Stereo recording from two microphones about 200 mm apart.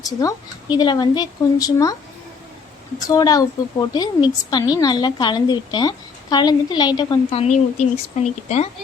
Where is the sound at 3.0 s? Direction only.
20° left (ahead or behind); by 8.7 s 35° left (ahead or behind).